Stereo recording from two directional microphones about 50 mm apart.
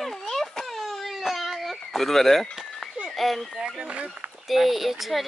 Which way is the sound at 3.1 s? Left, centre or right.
Centre.